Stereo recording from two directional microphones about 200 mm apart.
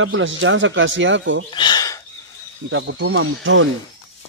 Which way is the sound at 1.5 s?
20° left (ahead or behind).